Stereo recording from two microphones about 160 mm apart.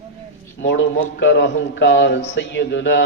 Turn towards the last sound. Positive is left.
turn(degrees=90)